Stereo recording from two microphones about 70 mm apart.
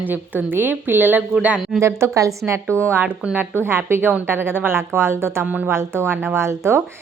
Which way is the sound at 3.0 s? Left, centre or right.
Centre.